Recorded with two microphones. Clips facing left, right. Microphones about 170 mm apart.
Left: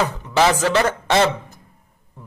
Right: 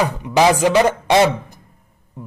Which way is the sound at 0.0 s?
15° right (ahead or behind).